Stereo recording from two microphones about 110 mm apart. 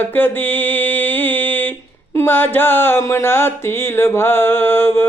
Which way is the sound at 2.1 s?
20° left (ahead or behind).